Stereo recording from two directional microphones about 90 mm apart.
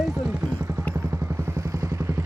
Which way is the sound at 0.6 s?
30° right (ahead or behind).